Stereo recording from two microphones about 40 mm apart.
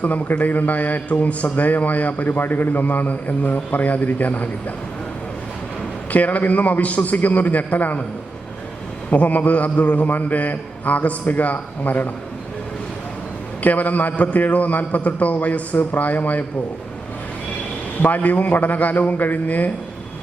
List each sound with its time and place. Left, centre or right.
0.0 s a man's voice: left
2.8 s a man's voice: left
6.1 s a man's voice: left
9.0 s a man's voice: left
13.6 s a man's voice: left
18.0 s a man's voice: left